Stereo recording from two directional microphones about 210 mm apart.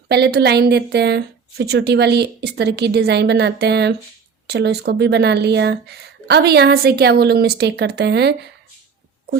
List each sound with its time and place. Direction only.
0.1 s speech: 50° right (ahead or behind)